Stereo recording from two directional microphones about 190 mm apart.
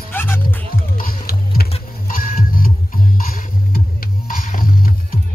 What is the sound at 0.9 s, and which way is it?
Music, 50° left (ahead or behind).